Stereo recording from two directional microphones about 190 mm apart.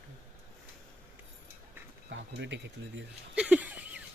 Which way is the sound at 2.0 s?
70° right (ahead or behind).